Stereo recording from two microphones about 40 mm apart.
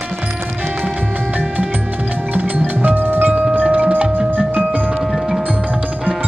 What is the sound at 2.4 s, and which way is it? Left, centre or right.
Tubular bells, right.